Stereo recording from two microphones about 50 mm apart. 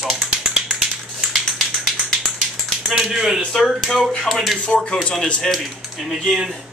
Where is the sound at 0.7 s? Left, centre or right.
Centre.